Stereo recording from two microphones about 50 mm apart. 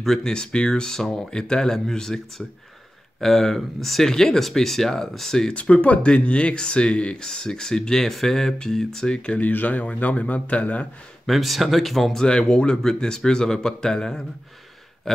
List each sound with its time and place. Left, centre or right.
0.0 s speech: centre
0.3 s speech: centre
5.5 s speech: left
9.5 s a man's voice: left
11.2 s speech: centre
15.1 s a sound: centre